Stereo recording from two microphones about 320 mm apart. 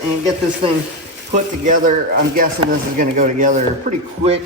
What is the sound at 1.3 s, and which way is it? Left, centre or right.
Speech, right.